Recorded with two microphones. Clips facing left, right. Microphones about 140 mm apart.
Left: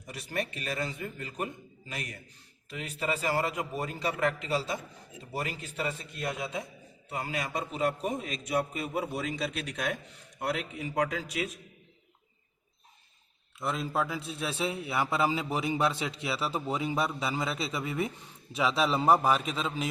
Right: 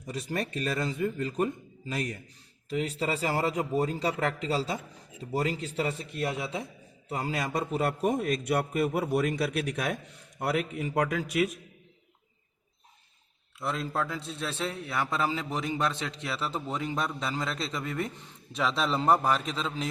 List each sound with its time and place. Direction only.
0.2 s a man's voice: 35° right (ahead or behind)
7.1 s a man's voice: 35° right (ahead or behind)
7.5 s a man's voice: 45° right (ahead or behind)
13.6 s a man's voice: centre (ahead or behind)